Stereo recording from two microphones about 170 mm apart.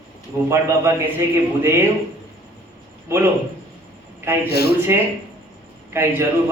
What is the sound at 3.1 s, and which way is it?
Speech, 15° right (ahead or behind).